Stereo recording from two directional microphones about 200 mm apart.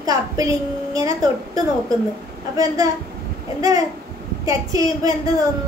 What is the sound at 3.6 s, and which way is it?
A child's voice, 15° right (ahead or behind).